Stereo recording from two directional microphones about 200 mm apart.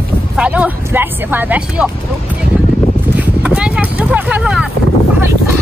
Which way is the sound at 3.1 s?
5° right (ahead or behind).